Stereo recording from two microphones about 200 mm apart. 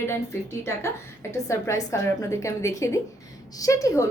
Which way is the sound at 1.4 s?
15° left (ahead or behind).